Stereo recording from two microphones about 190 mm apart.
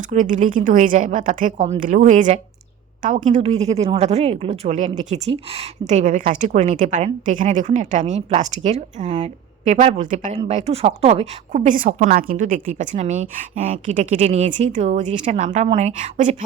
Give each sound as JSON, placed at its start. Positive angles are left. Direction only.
{"t": 0.1, "sound": "a woman's voice", "side_deg": -40}